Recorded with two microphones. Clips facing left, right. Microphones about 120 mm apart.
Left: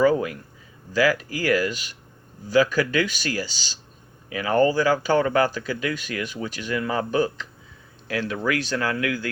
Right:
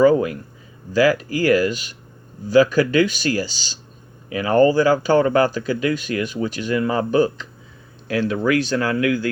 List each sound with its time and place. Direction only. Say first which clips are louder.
0.0 s speech: right 5 dB; 35° right (ahead or behind)